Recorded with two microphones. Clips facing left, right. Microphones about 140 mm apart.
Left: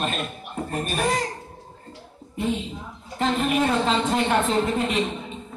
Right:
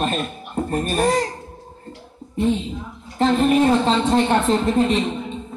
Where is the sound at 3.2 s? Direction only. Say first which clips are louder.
Right 6 dB; 35° right (ahead or behind).